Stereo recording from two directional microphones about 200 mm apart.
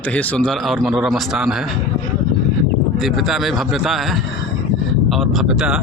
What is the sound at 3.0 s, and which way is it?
A man's voice, centre (ahead or behind).